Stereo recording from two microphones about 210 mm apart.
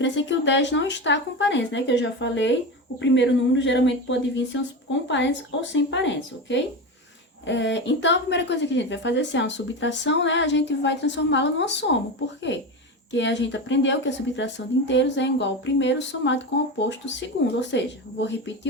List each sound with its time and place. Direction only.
0.0 s a woman's voice: 60° left (ahead or behind)
13.1 s a woman's voice: 60° left (ahead or behind)